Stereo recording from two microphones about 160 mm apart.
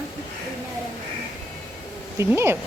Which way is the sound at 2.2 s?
15° right (ahead or behind).